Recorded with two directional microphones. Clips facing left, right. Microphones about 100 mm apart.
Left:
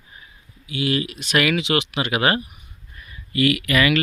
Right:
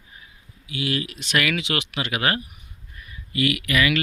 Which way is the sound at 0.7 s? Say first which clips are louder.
Left 4 dB; 30° left (ahead or behind).